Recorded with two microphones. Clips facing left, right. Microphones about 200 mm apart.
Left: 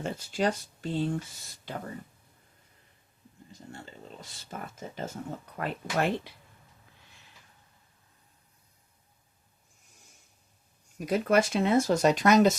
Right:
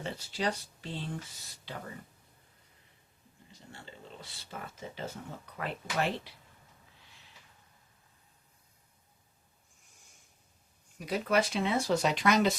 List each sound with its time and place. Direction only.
0.0 s speech: 45° left (ahead or behind)
3.5 s speech: 45° left (ahead or behind)
11.0 s speech: 45° left (ahead or behind)